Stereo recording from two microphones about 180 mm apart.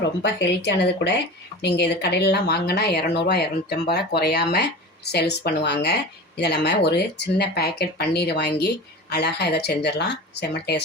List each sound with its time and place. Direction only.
0.0 s speech: 75° left (ahead or behind)